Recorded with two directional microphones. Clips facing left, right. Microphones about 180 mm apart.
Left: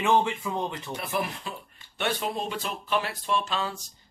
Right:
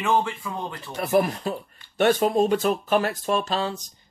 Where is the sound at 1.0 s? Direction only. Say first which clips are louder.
Right 11 dB; 45° right (ahead or behind).